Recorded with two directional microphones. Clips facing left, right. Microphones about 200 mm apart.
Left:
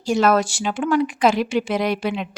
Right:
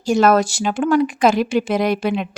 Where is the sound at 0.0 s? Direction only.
45° right (ahead or behind).